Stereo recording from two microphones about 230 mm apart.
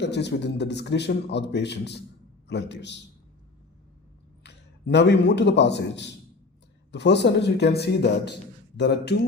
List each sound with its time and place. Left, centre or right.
0.0 s a man's voice: left
4.4 s a man's voice: left